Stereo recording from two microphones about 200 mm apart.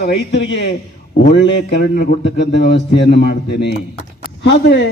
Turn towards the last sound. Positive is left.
turn(degrees=60)  # may be behind; listen again after turning